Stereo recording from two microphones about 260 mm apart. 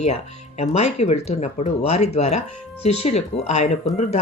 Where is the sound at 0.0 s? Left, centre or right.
Left.